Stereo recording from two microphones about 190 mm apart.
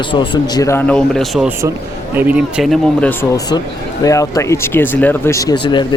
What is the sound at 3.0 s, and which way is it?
Speech, 10° left (ahead or behind).